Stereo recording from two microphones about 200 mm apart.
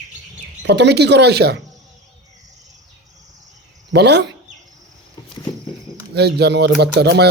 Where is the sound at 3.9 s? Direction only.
55° right (ahead or behind).